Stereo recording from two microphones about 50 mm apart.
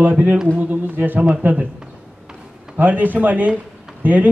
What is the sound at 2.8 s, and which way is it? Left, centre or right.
Speech, right.